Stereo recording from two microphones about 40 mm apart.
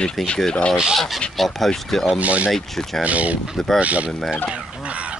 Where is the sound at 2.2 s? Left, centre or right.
Right.